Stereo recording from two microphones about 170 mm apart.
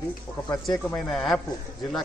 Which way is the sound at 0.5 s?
5° left (ahead or behind).